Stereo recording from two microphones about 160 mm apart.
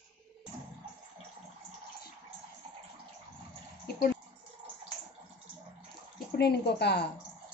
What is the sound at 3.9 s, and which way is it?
Speech, 85° left.